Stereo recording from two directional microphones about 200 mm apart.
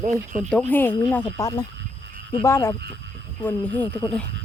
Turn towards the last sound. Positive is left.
turn(degrees=5)  # may be behind; listen again after turning